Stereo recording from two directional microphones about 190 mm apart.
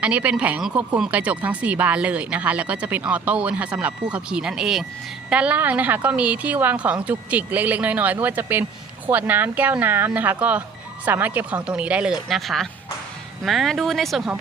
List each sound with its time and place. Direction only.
0.0 s speech: 5° right (ahead or behind)